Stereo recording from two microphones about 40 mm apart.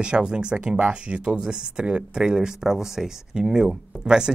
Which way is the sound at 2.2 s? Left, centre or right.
Centre.